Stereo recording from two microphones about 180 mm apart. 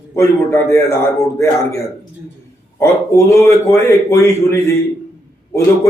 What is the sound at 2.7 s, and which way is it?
Speech, 15° left (ahead or behind).